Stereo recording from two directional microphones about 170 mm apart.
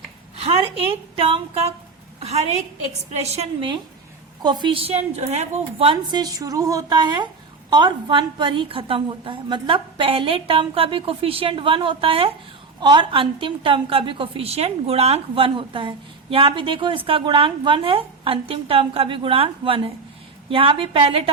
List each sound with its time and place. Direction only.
0.3 s a woman's voice: 35° right (ahead or behind)